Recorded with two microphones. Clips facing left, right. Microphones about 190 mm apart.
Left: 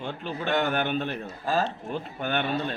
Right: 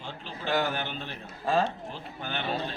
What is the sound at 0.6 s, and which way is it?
Speech, 60° left (ahead or behind).